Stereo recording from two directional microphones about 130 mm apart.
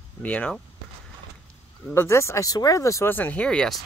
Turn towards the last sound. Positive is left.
turn(degrees=5)  # may be behind; listen again after turning